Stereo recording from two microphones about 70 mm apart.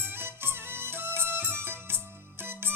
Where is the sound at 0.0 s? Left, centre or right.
Right.